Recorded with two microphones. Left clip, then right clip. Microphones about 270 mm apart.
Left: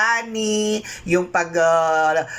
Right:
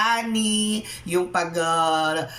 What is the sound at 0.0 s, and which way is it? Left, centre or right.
Speech, centre.